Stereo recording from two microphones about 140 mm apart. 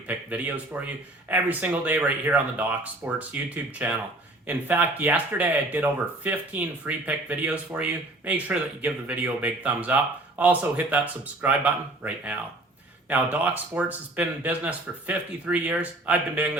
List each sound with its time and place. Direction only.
0.1 s speech: 10° right (ahead or behind)